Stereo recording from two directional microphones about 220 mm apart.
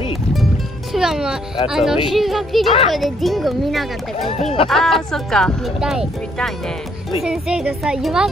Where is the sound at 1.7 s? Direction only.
Centre (ahead or behind).